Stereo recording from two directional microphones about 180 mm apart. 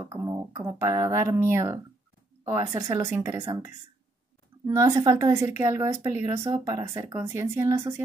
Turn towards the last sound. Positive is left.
turn(degrees=-15)  # may be behind; listen again after turning